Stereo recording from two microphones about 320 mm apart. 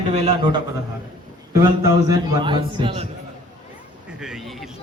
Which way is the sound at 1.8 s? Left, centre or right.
Centre.